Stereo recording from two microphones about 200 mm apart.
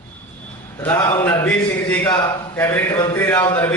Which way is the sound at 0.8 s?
10° left (ahead or behind).